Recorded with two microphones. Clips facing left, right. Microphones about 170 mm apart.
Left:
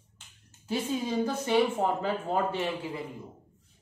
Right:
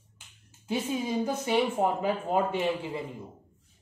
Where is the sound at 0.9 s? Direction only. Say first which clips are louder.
Left 1 dB; 10° right (ahead or behind).